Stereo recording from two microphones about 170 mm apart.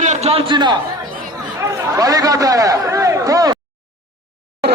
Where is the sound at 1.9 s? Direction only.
20° right (ahead or behind).